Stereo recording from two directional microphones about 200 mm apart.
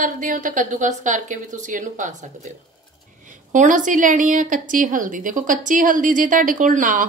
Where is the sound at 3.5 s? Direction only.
40° right (ahead or behind).